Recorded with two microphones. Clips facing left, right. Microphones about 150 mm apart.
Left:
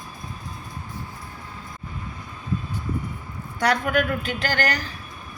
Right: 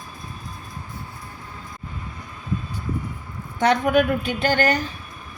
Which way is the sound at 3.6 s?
20° right (ahead or behind).